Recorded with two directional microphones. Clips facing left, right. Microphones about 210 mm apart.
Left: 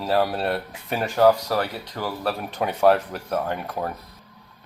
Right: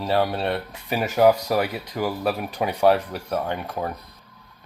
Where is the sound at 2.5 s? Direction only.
Centre (ahead or behind).